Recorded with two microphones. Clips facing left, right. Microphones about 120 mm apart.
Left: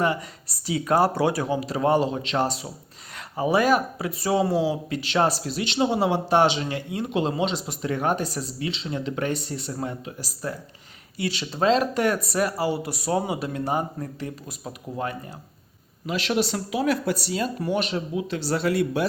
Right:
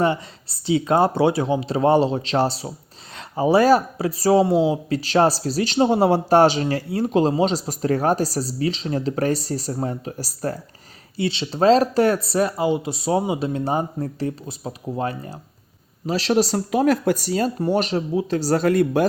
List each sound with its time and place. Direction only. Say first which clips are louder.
0.0 s speech: right 4 dB; 30° right (ahead or behind)
11.2 s speech: right 5 dB; 25° right (ahead or behind); by 19.0 s 45° right (ahead or behind)